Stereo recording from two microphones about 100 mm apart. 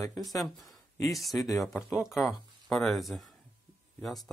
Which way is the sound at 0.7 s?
35° left (ahead or behind).